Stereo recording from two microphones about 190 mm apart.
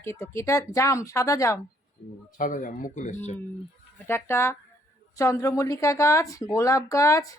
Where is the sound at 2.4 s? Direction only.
45° left (ahead or behind).